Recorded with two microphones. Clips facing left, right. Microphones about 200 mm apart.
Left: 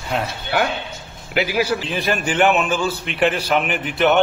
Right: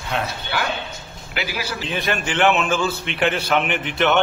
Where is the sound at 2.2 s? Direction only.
40° left (ahead or behind).